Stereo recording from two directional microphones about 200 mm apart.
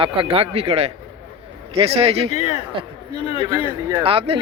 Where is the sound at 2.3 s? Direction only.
35° left (ahead or behind).